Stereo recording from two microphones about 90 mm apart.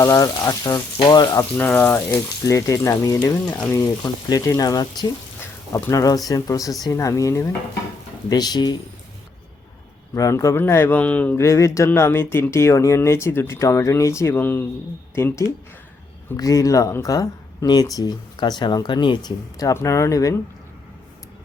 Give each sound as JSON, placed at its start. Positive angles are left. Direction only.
{"t": 0.0, "sound": "speech", "side_deg": 40}
{"t": 1.5, "sound": "speech", "side_deg": 20}
{"t": 2.5, "sound": "speech", "side_deg": 35}
{"t": 8.3, "sound": "speech", "side_deg": 50}
{"t": 10.2, "sound": "speech", "side_deg": 35}
{"t": 10.6, "sound": "speech", "side_deg": 25}
{"t": 11.3, "sound": "speech", "side_deg": 35}
{"t": 14.3, "sound": "speech", "side_deg": 25}
{"t": 16.4, "sound": "speech", "side_deg": 40}
{"t": 19.7, "sound": "speech", "side_deg": 35}